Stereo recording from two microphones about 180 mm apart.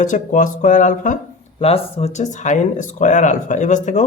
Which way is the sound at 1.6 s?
35° left (ahead or behind).